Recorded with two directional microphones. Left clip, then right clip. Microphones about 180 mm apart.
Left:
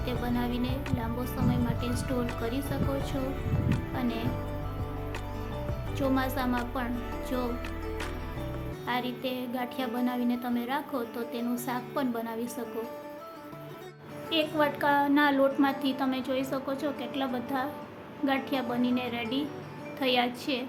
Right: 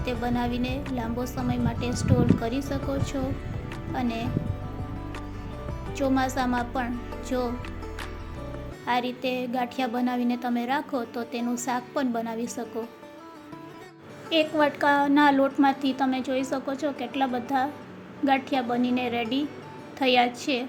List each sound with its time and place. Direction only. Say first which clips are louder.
0.0 s a woman's voice: right 4 dB; 20° right (ahead or behind)
6.0 s a woman's voice: right 4 dB; 25° right (ahead or behind)
8.9 s a woman's voice: right 6 dB; 25° right (ahead or behind)
14.3 s a woman's voice: right 4 dB; 25° right (ahead or behind)